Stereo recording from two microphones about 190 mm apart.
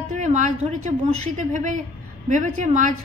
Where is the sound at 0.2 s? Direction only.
40° right (ahead or behind).